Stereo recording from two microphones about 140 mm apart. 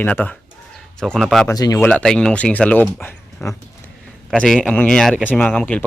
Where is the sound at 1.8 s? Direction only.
5° left (ahead or behind).